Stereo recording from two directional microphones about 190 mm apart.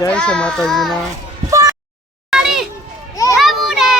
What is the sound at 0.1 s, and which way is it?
Speech, 5° left (ahead or behind).